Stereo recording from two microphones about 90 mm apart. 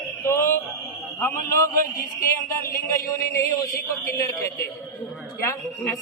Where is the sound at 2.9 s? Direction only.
35° left (ahead or behind).